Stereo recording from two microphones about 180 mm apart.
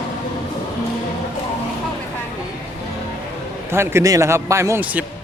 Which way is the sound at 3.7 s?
15° right (ahead or behind).